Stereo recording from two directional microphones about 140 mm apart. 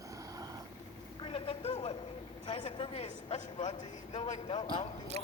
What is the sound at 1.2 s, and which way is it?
Vehicle, 40° left (ahead or behind).